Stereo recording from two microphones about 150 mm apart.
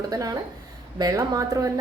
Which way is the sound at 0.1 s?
25° right (ahead or behind).